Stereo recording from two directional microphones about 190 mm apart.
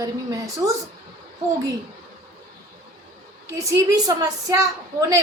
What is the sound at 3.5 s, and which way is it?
A woman's voice, 15° right (ahead or behind).